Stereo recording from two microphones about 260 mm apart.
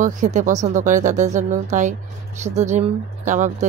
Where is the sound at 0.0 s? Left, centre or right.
Right.